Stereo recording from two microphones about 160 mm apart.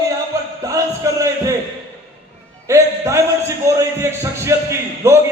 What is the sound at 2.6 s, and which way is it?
A man's voice, 20° right (ahead or behind).